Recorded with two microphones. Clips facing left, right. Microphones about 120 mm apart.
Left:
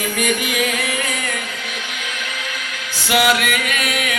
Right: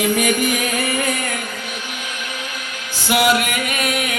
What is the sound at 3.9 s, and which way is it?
Music, 70° left (ahead or behind).